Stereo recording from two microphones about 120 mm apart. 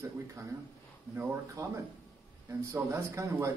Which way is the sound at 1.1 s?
25° right (ahead or behind).